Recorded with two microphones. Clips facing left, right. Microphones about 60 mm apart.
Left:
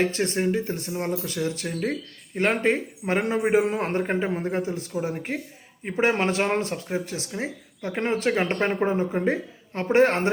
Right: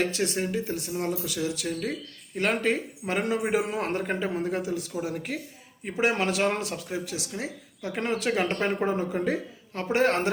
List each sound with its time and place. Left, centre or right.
0.0 s speech: left